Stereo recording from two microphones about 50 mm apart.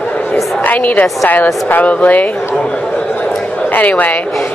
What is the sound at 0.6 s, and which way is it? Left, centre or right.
Speech, left.